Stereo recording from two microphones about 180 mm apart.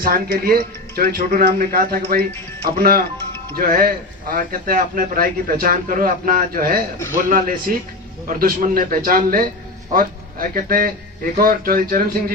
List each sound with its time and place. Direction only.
0.0 s a man's voice: 55° right (ahead or behind)